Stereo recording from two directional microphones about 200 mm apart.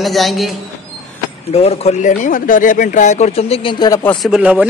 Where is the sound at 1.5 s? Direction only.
30° left (ahead or behind).